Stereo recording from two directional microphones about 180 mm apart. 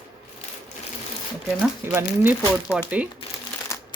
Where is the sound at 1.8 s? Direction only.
15° right (ahead or behind).